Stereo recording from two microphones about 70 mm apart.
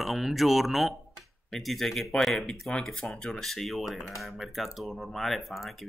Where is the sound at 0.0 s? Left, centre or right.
Centre.